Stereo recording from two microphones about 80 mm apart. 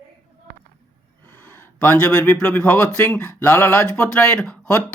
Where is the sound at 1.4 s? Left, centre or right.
Left.